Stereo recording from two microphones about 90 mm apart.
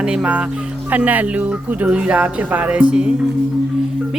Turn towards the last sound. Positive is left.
turn(degrees=-10)  # may be behind; listen again after turning